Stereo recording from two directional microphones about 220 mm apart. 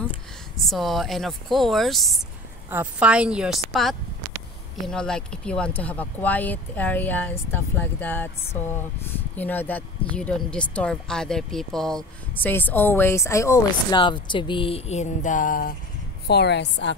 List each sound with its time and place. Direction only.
0.7 s a woman's voice: centre (ahead or behind); by 15.7 s 40° left (ahead or behind)
16.3 s a woman's voice: 50° left (ahead or behind)